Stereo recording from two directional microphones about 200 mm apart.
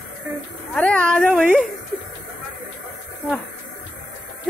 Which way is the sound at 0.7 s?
5° left (ahead or behind).